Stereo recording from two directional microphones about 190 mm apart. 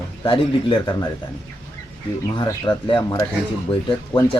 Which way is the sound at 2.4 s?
25° left (ahead or behind).